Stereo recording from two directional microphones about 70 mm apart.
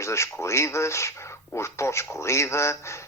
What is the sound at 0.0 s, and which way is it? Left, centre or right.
Speech, left.